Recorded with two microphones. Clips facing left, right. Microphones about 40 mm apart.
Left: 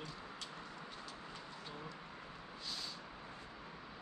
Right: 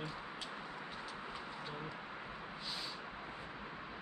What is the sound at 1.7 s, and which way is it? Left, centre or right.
Bird, right.